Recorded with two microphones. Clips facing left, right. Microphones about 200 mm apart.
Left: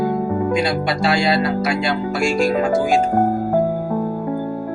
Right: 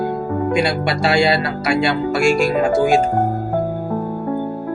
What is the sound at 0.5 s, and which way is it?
Speech, 70° right (ahead or behind).